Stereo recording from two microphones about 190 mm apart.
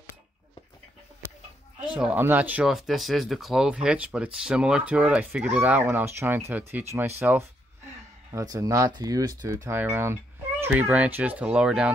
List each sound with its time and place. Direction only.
2.0 s speech: 10° right (ahead or behind)